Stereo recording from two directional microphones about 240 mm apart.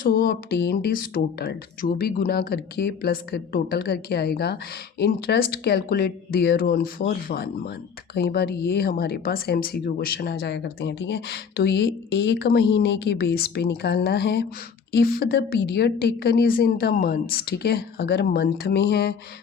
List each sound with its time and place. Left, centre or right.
0.0 s speech: left